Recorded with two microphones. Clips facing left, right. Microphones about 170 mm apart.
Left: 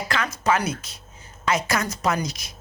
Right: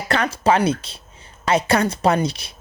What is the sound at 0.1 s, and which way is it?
A woman's voice, 30° right (ahead or behind).